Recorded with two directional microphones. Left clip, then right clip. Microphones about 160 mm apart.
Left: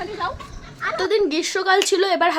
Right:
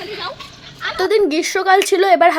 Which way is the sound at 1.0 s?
30° right (ahead or behind).